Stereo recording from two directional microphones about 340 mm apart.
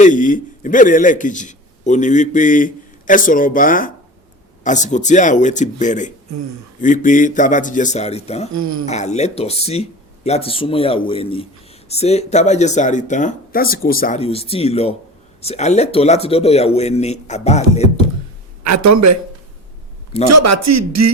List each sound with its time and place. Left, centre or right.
0.0 s a man's voice: left
8.5 s a man's voice: right
8.9 s speech: centre
18.6 s speech: right
20.2 s a man's voice: right